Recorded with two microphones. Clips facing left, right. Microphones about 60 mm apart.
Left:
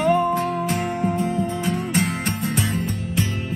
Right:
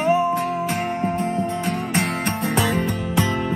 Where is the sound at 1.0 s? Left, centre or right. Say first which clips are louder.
Even; right.